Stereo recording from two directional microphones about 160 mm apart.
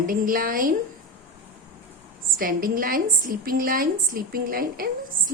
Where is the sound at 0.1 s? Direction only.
60° right (ahead or behind).